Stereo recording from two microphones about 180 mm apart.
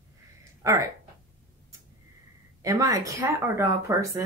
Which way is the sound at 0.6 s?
15° right (ahead or behind).